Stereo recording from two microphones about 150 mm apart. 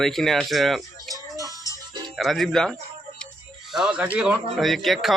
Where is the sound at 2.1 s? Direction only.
Centre (ahead or behind).